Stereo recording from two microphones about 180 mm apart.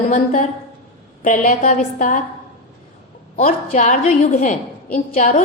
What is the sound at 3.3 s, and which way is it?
A woman's voice, 45° left (ahead or behind).